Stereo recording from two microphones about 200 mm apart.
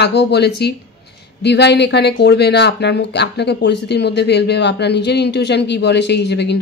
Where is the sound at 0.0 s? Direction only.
60° left (ahead or behind).